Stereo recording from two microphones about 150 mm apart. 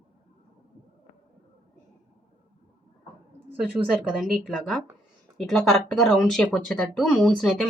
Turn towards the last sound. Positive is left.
turn(degrees=5)  # may be behind; listen again after turning